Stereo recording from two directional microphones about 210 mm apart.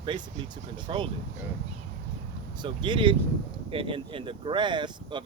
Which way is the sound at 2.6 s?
20° right (ahead or behind).